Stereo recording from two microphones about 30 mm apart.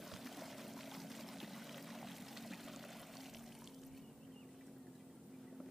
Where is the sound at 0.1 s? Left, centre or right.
Centre.